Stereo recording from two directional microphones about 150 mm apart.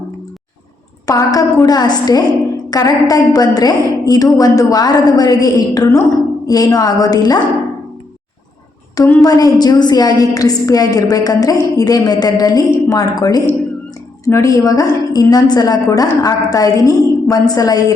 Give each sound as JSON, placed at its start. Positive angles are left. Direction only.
{"t": 1.0, "sound": "a woman's voice", "side_deg": 25}
{"t": 9.2, "sound": "a woman's voice", "side_deg": 25}